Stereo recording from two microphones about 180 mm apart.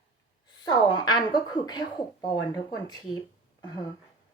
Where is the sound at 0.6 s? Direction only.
25° left (ahead or behind).